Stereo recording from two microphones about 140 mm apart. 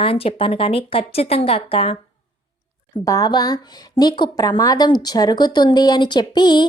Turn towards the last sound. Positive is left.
turn(degrees=30)  # may be behind; listen again after turning